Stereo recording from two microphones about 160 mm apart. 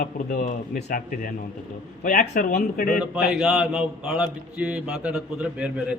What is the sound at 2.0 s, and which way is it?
Speech, 60° left (ahead or behind).